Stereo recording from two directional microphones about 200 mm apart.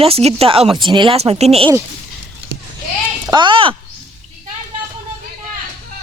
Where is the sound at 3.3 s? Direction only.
25° right (ahead or behind).